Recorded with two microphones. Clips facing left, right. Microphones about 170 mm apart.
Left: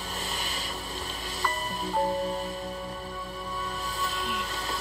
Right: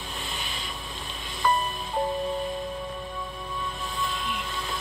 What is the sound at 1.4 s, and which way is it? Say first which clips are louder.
Music: right 6 dB; 40° left (ahead or behind).